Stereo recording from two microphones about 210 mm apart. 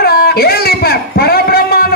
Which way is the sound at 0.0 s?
45° left (ahead or behind).